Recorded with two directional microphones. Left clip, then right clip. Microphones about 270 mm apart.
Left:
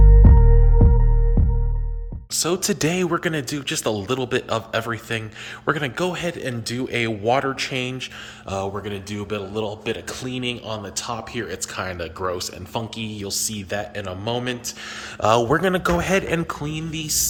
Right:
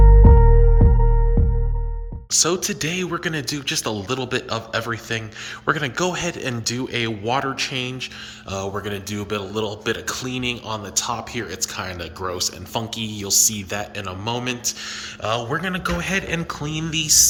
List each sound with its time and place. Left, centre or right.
0.2 s music: centre
2.3 s a man's voice: centre
2.6 s a man's voice: centre
15.2 s a man's voice: left; by 17.2 s centre